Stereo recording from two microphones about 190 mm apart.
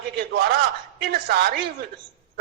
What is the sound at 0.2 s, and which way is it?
A man's voice, 55° right (ahead or behind).